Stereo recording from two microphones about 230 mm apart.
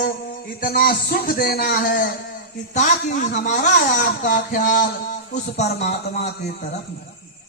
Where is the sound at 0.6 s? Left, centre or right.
Left.